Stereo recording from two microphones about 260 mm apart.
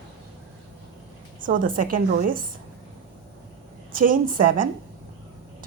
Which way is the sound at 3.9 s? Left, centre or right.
Right.